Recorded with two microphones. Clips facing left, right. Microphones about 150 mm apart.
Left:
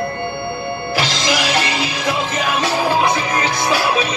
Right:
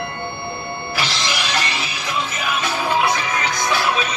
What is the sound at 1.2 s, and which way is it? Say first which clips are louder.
Music: left 5 dB; 45° left (ahead or behind).